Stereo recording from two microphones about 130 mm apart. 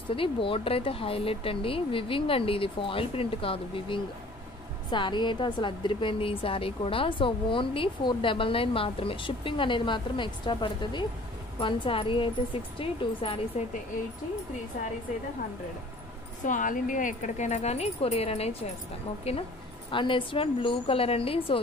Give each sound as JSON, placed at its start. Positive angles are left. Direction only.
{"t": 0.1, "sound": "a woman's voice", "side_deg": 45}
{"t": 16.4, "sound": "speech", "side_deg": 85}
{"t": 19.9, "sound": "speech", "side_deg": 40}